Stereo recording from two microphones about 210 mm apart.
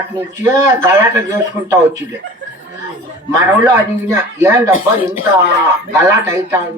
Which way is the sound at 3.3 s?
10° right (ahead or behind).